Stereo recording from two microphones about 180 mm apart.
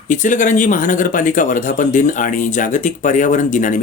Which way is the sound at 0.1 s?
45° left (ahead or behind).